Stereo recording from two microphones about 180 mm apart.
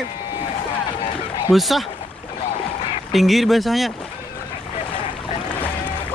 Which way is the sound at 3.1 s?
Centre (ahead or behind).